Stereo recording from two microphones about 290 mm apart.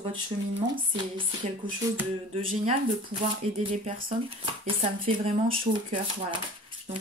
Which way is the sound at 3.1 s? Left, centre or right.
Right.